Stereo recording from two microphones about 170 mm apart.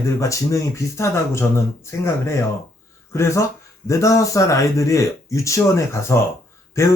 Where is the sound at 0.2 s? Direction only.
20° left (ahead or behind).